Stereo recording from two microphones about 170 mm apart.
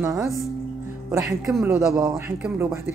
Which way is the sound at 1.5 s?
Centre (ahead or behind).